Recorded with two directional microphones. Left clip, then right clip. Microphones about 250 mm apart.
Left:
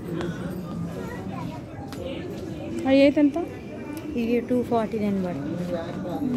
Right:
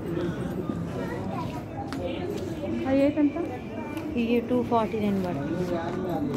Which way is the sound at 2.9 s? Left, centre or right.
Left.